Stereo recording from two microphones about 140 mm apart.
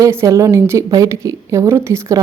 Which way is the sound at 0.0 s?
20° right (ahead or behind).